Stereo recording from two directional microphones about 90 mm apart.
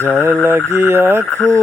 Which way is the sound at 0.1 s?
25° right (ahead or behind).